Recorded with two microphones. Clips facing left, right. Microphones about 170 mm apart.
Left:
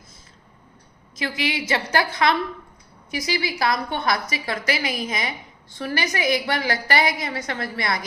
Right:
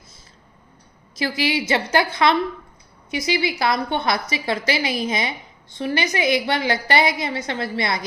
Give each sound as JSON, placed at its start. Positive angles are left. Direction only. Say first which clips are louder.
{"t": 1.1, "sound": "a woman's voice", "louder": "right 4 dB", "side_deg": -35}